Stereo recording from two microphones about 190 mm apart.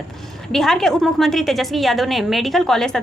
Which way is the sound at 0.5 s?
Centre (ahead or behind).